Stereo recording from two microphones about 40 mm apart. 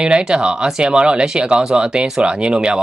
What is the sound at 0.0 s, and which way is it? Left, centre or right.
Speech, right.